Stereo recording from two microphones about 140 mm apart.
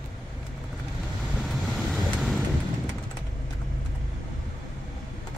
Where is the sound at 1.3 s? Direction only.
Centre (ahead or behind).